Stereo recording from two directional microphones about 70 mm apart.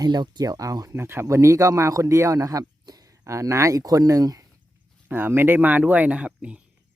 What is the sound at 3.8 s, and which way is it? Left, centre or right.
Speech, right.